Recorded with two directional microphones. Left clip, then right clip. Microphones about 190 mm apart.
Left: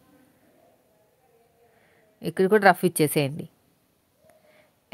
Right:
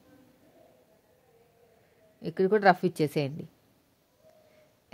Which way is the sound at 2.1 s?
40° left (ahead or behind).